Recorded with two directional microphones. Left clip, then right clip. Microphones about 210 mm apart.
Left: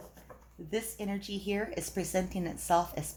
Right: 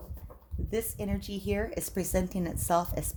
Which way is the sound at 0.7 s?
50° right (ahead or behind).